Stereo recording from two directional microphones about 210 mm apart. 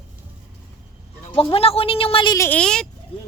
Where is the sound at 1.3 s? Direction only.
25° left (ahead or behind); by 2.8 s 5° left (ahead or behind).